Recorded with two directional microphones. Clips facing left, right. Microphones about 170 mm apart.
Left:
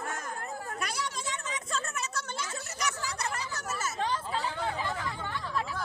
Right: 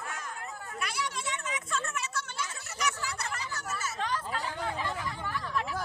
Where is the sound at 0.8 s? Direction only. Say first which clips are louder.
Right 3 dB; 40° left (ahead or behind).